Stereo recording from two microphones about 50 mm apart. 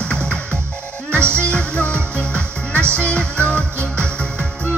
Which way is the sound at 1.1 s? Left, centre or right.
Right.